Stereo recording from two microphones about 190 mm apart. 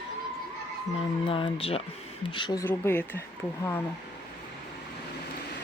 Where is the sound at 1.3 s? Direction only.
30° left (ahead or behind).